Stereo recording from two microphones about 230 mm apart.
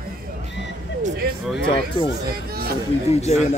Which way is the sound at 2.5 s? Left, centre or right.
Right.